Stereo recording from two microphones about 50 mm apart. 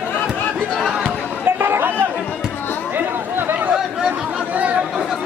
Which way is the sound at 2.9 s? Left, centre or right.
Right.